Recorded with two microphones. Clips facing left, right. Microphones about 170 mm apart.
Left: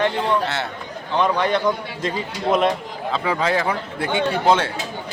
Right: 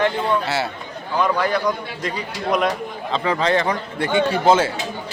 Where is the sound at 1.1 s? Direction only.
20° left (ahead or behind).